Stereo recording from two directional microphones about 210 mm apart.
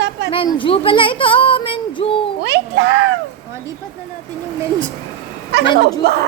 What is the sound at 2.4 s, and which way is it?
Speech, 55° right (ahead or behind).